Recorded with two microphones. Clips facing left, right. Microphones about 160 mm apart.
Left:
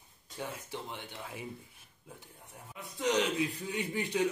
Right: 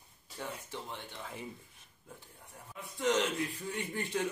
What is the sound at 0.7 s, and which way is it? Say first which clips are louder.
Speech: left 2 dB; 10° left (ahead or behind).